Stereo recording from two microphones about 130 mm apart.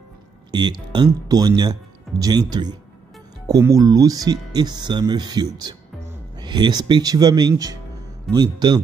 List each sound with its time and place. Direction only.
0.5 s speech: 35° right (ahead or behind)